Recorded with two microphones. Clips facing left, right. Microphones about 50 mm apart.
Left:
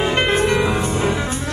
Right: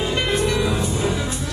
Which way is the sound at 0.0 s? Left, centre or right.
Left.